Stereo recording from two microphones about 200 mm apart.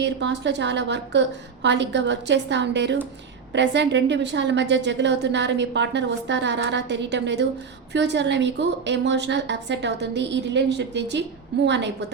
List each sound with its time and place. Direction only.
0.0 s a woman's voice: 60° right (ahead or behind)